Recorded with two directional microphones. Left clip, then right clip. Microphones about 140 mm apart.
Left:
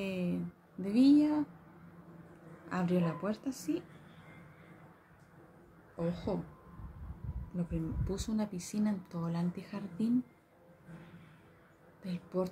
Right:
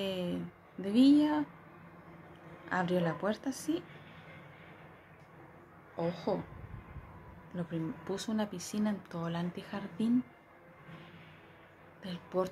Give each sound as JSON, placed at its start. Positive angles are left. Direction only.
{"t": 0.0, "sound": "a sound", "side_deg": 20}
{"t": 0.8, "sound": "speech", "side_deg": 20}
{"t": 2.7, "sound": "speech", "side_deg": 20}
{"t": 5.9, "sound": "speech", "side_deg": 20}
{"t": 7.5, "sound": "speech", "side_deg": 25}
{"t": 12.0, "sound": "speech", "side_deg": 20}